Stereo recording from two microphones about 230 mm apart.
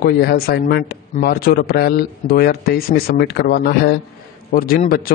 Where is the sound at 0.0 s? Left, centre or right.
Left.